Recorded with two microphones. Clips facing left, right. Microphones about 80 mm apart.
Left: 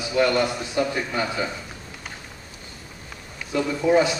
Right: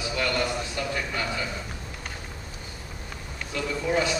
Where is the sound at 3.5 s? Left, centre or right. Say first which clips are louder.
Left 7 dB; left.